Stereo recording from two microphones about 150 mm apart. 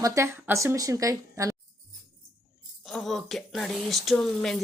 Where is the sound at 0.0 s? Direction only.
20° right (ahead or behind).